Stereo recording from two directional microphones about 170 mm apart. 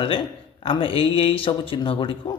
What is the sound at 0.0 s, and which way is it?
A man's voice, 30° left (ahead or behind).